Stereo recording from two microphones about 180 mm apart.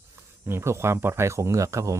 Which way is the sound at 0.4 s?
15° right (ahead or behind).